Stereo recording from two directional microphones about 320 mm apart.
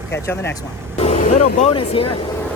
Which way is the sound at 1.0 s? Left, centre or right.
Left.